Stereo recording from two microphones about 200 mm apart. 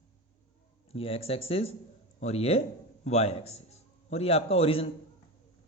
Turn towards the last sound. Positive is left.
turn(degrees=30)  # may be behind; listen again after turning